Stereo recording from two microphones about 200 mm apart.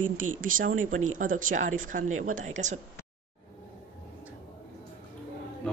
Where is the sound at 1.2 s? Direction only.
40° right (ahead or behind).